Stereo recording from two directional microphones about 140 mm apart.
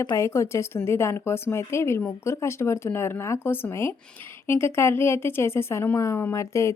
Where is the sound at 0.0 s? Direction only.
20° left (ahead or behind).